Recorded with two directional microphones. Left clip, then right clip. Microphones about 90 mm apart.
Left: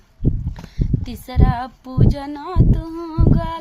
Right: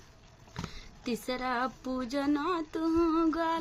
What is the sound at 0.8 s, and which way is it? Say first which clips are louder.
Speech: left 8 dB; 35° left (ahead or behind).